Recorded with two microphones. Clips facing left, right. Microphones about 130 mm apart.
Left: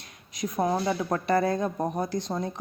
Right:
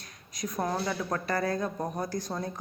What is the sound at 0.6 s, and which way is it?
Speech, 15° left (ahead or behind).